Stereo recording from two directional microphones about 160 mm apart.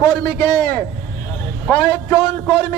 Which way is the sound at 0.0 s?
15° left (ahead or behind).